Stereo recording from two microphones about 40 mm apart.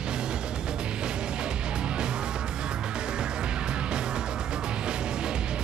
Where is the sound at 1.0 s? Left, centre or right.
Right.